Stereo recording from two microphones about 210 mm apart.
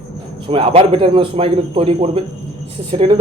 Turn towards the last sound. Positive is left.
turn(degrees=-25)  # may be behind; listen again after turning